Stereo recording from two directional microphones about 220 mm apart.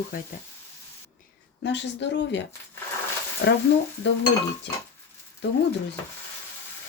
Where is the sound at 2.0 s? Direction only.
55° left (ahead or behind).